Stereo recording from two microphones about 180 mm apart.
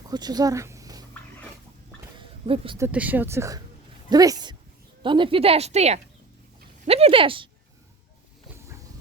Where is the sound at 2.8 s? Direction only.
10° right (ahead or behind); by 7.5 s 30° right (ahead or behind).